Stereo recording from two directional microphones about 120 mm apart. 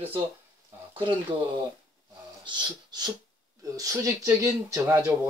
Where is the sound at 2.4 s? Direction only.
40° right (ahead or behind).